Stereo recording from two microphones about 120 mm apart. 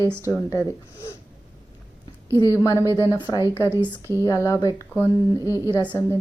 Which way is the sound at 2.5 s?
25° left (ahead or behind).